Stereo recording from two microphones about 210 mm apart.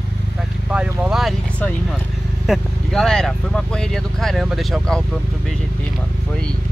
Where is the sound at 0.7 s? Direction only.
5° right (ahead or behind).